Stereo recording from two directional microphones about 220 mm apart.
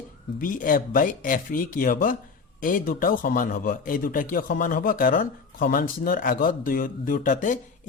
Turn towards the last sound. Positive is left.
turn(degrees=35)  # may be behind; listen again after turning